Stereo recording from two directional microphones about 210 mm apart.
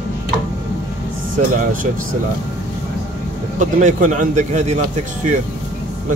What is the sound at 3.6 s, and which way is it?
A man's voice, 35° right (ahead or behind).